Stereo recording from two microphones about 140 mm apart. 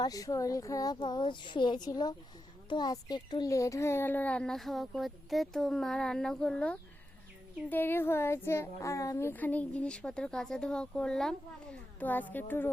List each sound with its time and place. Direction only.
0.0 s a woman's voice: 25° left (ahead or behind)